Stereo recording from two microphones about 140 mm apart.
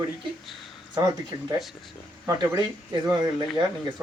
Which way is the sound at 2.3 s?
25° right (ahead or behind).